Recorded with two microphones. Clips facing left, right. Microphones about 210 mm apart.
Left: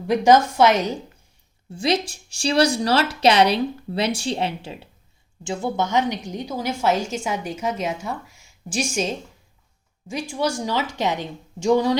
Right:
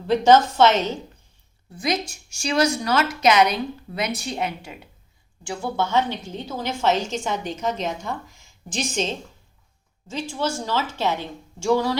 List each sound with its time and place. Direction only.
0.1 s a woman's voice: 10° left (ahead or behind)
1.7 s a woman's voice: 30° left (ahead or behind)